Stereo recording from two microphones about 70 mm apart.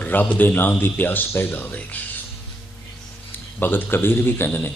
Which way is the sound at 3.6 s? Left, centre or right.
Left.